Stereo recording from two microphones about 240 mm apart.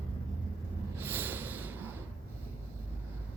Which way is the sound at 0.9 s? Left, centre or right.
Centre.